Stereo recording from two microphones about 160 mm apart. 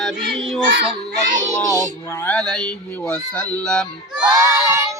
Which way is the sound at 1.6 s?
25° right (ahead or behind).